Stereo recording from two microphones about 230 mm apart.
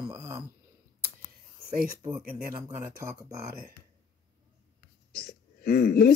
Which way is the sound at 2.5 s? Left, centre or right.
Centre.